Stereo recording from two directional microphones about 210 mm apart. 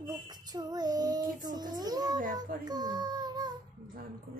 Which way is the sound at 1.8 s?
20° right (ahead or behind).